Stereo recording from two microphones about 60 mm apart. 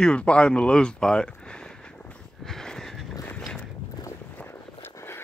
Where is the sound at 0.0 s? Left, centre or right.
Centre.